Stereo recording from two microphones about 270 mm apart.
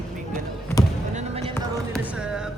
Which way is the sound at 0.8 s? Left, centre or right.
Centre.